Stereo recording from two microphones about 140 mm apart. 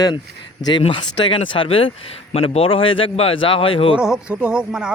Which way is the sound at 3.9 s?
5° right (ahead or behind).